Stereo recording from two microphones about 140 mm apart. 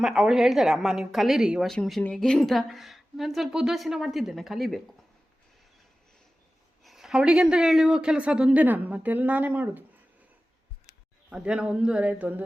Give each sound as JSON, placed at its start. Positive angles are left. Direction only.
{"t": 0.0, "sound": "a woman's voice", "side_deg": -5}
{"t": 6.8, "sound": "speech", "side_deg": 0}
{"t": 11.3, "sound": "speech", "side_deg": -5}